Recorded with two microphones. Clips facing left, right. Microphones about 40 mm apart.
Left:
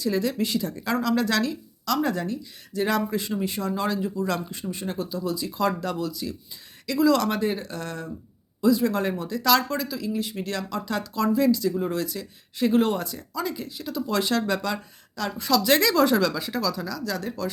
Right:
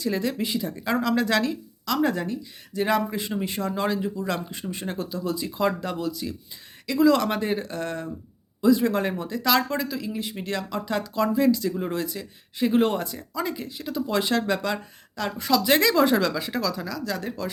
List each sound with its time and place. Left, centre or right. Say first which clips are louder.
0.0 s speech: left 1 dB; right
0.9 s speech: right 1 dB; right
3.2 s speech: even; right
4.5 s speech: even; right